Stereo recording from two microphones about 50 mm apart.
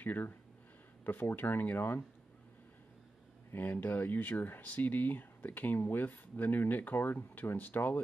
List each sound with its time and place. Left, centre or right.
0.0 s speech: left
3.5 s speech: left